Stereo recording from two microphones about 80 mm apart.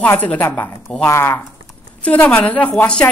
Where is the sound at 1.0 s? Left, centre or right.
Left.